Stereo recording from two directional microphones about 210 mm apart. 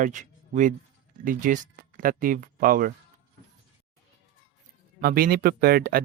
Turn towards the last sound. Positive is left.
turn(degrees=-45)  # may be behind; listen again after turning